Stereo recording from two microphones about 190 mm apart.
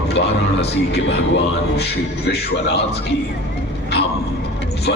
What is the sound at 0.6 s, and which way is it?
Speech, 60° left (ahead or behind).